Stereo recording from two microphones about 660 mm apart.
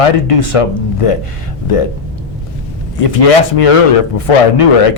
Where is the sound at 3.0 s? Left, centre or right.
Left.